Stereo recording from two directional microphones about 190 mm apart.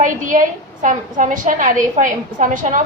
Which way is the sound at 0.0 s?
45° right (ahead or behind).